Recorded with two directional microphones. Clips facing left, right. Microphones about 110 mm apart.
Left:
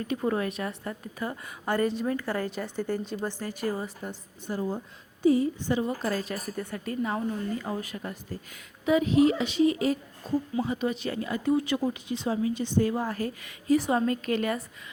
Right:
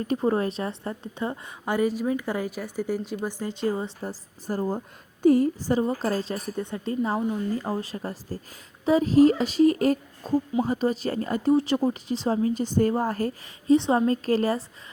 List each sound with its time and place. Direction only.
0.0 s speech: 30° right (ahead or behind)
1.6 s a woman's voice: 10° right (ahead or behind); by 13.3 s 40° right (ahead or behind)
13.7 s a woman's voice: 25° right (ahead or behind)